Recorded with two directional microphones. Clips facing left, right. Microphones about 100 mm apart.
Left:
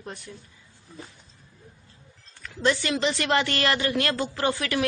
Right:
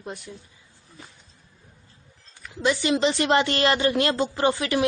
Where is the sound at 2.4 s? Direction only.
15° right (ahead or behind).